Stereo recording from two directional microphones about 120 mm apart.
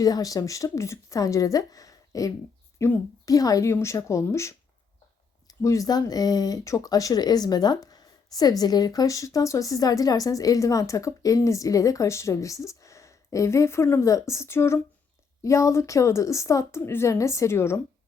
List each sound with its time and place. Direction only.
0.0 s speech: 30° left (ahead or behind)